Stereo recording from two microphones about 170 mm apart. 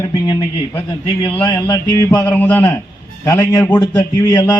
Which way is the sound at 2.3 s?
10° left (ahead or behind).